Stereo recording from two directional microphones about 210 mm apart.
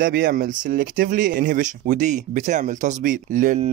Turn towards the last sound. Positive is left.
turn(degrees=-40)  # may be behind; listen again after turning